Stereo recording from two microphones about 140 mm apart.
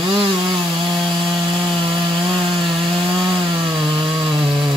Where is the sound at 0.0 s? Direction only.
35° right (ahead or behind).